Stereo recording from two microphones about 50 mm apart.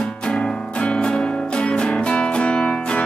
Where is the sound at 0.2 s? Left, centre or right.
Centre.